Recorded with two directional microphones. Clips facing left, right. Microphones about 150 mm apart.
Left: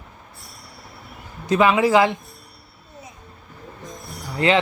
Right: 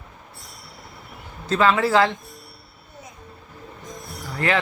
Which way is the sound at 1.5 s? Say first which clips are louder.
Left 2 dB; 15° left (ahead or behind).